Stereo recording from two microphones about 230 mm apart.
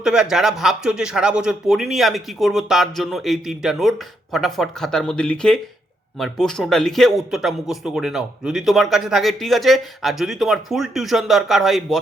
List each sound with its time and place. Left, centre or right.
0.0 s speech: centre